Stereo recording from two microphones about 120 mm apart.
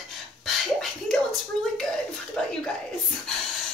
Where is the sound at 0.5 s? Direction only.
5° left (ahead or behind).